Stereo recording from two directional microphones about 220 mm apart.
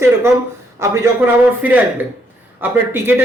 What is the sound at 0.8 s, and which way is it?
Speech, 10° right (ahead or behind).